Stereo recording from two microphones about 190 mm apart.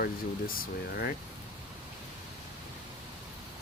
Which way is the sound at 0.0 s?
50° left (ahead or behind).